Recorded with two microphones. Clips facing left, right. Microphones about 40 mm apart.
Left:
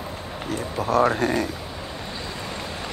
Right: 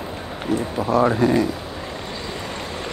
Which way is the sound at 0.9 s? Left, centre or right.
Left.